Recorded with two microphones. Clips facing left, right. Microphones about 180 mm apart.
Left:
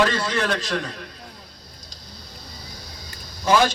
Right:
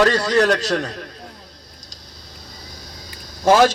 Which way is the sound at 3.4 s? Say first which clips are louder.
Right 5 dB; 45° right (ahead or behind).